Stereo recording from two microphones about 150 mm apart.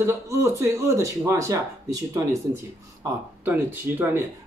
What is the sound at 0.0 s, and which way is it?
Speech, 20° right (ahead or behind).